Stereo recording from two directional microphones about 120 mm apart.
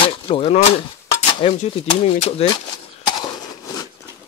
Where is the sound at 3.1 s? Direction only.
35° left (ahead or behind).